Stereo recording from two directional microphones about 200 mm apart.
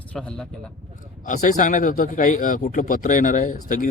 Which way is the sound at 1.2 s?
40° left (ahead or behind).